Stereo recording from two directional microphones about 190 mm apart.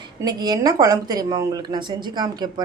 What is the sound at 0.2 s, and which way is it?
Speech, 20° right (ahead or behind).